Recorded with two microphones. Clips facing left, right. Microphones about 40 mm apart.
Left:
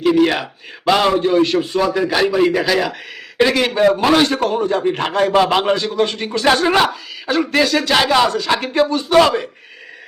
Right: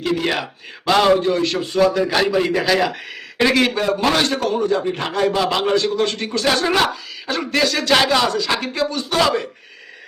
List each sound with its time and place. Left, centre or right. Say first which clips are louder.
0.0 s a man's voice: left 6 dB; centre
1.2 s a man's voice: left 4 dB; centre
4.4 s speech: left 1 dB; left
5.5 s a man's voice: left 2 dB; left
5.8 s speech: left 1 dB; centre
6.3 s a man's voice: left 5 dB; left
6.7 s speech: left 3 dB; centre
8.4 s speech: left 4 dB; left
9.0 s a man's voice: left 5 dB; left